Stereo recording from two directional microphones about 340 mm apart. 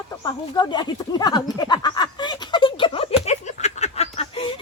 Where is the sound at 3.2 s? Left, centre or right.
Centre.